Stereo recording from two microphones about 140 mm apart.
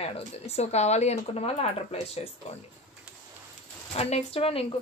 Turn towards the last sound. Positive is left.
turn(degrees=40)  # may be behind; listen again after turning